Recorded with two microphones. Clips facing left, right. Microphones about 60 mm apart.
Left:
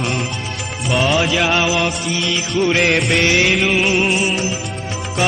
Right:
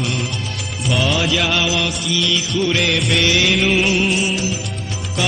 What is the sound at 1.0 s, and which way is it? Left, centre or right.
Music, left.